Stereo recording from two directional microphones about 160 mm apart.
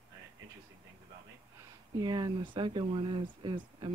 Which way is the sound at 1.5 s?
25° right (ahead or behind).